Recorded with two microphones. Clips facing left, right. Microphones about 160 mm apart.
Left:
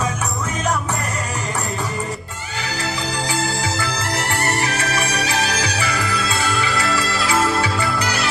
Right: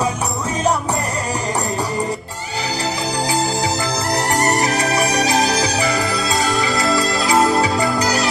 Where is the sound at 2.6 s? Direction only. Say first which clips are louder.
Right 3 dB; 35° right (ahead or behind).